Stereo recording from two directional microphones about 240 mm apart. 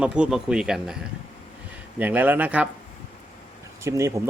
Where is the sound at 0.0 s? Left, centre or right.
Centre.